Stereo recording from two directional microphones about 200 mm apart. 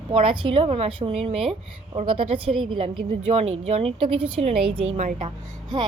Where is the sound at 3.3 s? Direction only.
30° right (ahead or behind).